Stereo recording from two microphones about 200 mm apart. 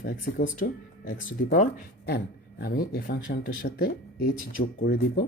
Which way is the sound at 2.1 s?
55° left (ahead or behind).